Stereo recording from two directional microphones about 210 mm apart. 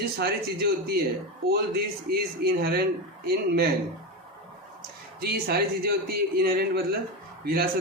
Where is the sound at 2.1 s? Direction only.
50° right (ahead or behind).